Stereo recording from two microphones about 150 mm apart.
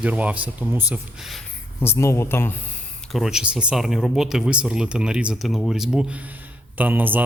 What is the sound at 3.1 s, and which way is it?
Speech, centre (ahead or behind).